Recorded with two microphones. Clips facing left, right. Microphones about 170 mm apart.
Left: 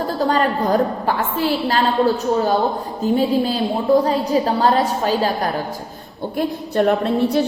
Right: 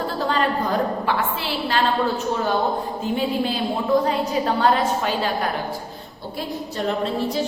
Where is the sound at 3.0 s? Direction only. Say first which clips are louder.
Left 8 dB; 40° left (ahead or behind).